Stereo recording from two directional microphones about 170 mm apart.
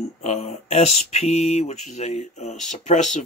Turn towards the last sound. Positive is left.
turn(degrees=45)  # may be behind; listen again after turning